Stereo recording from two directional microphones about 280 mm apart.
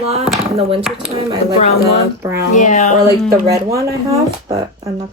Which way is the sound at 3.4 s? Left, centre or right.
Centre.